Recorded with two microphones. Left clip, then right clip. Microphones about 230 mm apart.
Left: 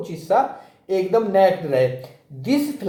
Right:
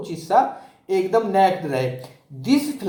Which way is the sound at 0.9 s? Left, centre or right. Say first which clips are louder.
Left 1 dB; right.